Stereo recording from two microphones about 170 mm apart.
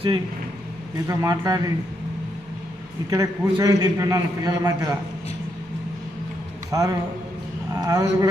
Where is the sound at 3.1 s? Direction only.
20° right (ahead or behind).